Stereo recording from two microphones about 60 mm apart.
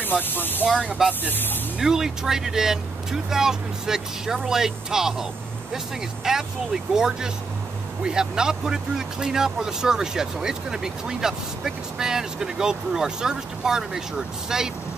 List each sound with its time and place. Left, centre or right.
0.2 s speech: left
0.7 s speech: centre
1.2 s speech: left
1.8 s speech: centre
6.2 s speech: centre